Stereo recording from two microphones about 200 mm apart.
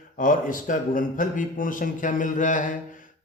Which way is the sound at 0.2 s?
45° left (ahead or behind).